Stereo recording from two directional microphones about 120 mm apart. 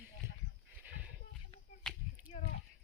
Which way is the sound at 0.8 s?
15° right (ahead or behind).